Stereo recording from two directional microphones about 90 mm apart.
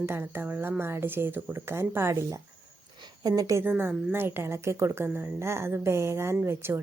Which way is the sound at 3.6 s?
25° right (ahead or behind).